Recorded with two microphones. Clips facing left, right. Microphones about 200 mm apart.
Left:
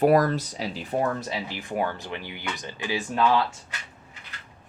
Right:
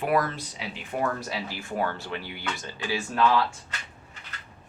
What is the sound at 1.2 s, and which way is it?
Speech, 20° left (ahead or behind).